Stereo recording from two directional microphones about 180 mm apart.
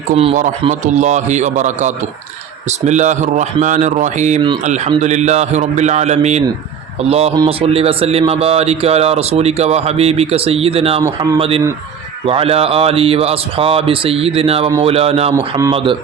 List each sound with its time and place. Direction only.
0.1 s speech: 35° right (ahead or behind)
11.0 s a man's voice: 20° right (ahead or behind)
11.3 s speech: 30° right (ahead or behind)
15.4 s a man's voice: 15° right (ahead or behind)
15.7 s a man's voice: 30° right (ahead or behind)